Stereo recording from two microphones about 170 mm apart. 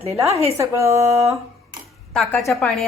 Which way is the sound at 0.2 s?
20° right (ahead or behind).